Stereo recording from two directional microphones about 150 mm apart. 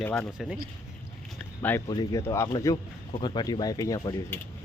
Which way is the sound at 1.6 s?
10° left (ahead or behind).